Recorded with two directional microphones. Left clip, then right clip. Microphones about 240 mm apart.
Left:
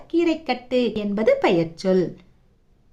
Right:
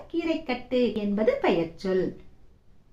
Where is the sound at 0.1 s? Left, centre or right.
Left.